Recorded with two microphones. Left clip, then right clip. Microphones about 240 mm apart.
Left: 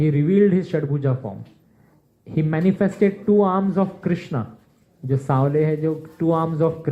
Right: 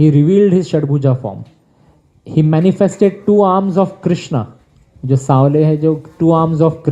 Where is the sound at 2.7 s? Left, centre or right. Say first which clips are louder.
Right 7 dB; right.